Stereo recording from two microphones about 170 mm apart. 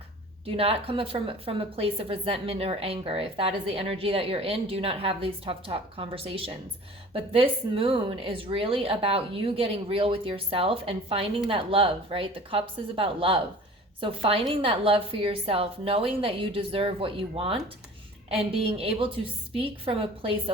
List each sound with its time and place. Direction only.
0.4 s a woman's voice: 35° right (ahead or behind)